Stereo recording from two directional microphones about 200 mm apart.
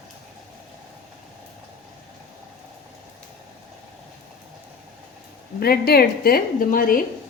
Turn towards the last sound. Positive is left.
turn(degrees=45)  # may be behind; listen again after turning